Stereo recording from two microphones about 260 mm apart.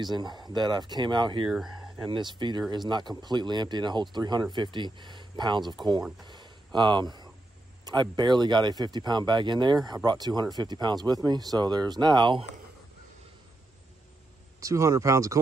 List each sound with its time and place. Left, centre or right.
0.0 s speech: centre
6.2 s a sound: centre
7.8 s speech: centre
14.6 s speech: centre